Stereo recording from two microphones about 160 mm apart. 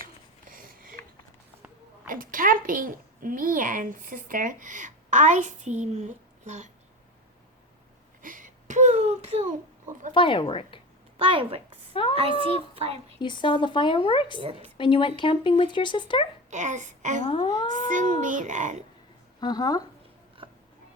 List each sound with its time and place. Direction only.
0.0 s a sound: 60° right (ahead or behind)
2.0 s a child's voice: 60° right (ahead or behind)
8.2 s a sound: 55° right (ahead or behind)
10.2 s speech: 30° left (ahead or behind)
11.2 s a woman's voice: 35° right (ahead or behind)
13.2 s speech: 30° left (ahead or behind)
14.3 s a child's voice: 35° right (ahead or behind)
14.8 s speech: 30° left (ahead or behind)
16.5 s a child's voice: 50° right (ahead or behind)
17.2 s speech: 35° left (ahead or behind)
17.8 s a child's voice: 55° right (ahead or behind)
19.4 s speech: 25° left (ahead or behind)
20.4 s a sound: 30° right (ahead or behind)